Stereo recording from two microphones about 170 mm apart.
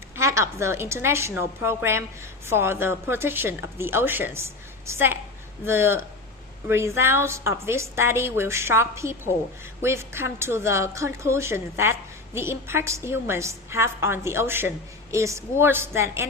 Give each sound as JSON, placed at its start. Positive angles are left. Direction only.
{"t": 0.2, "sound": "a woman's voice", "side_deg": -15}